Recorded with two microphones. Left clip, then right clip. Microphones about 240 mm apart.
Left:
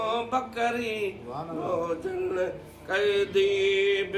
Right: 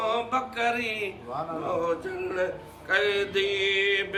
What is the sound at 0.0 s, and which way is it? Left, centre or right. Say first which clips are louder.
Mantra: right 1 dB; centre.